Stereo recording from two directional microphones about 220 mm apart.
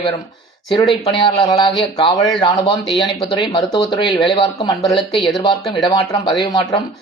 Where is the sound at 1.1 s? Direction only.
20° left (ahead or behind).